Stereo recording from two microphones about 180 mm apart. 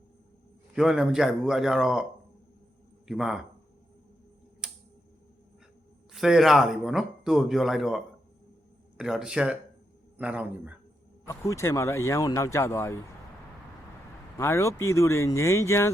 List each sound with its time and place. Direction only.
0.8 s speech: 5° right (ahead or behind)
3.1 s speech: 5° right (ahead or behind)
4.6 s tick-tock: 5° right (ahead or behind)
6.1 s speech: centre (ahead or behind)
11.3 s speech: 15° left (ahead or behind)
14.3 s speech: 15° left (ahead or behind)